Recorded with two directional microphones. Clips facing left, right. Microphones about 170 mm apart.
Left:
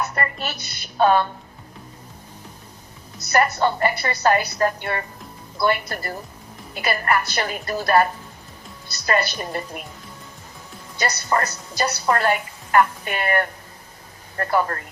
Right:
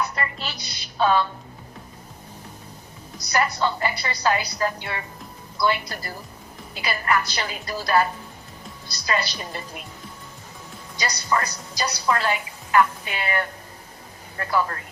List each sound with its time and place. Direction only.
0.0 s a woman's voice: 50° left (ahead or behind)
3.3 s a woman's voice: 50° left (ahead or behind)
9.0 s a woman's voice: 55° left (ahead or behind)
10.9 s a woman's voice: 55° left (ahead or behind)